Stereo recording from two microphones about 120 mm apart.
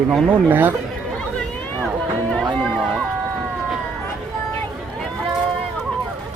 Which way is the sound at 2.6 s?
5° left (ahead or behind).